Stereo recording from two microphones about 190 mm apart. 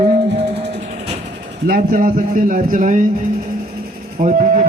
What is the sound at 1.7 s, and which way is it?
A man's voice, 45° right (ahead or behind).